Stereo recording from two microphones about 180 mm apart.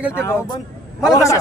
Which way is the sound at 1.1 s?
15° left (ahead or behind).